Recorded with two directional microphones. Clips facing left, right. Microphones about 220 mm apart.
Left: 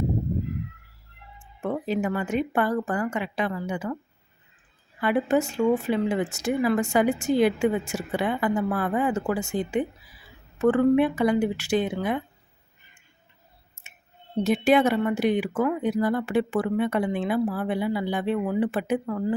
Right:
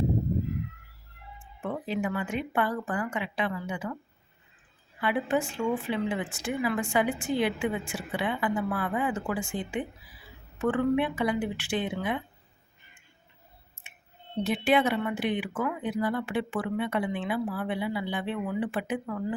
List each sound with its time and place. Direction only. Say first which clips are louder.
1.6 s speech: left 5 dB; 40° left (ahead or behind)
4.9 s speech: left 5 dB; 45° left (ahead or behind)
13.8 s clicking: left 1 dB; 40° left (ahead or behind)
14.4 s speech: left 5 dB; 40° left (ahead or behind)